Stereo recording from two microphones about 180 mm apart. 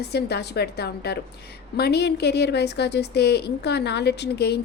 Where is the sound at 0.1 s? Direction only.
65° left (ahead or behind).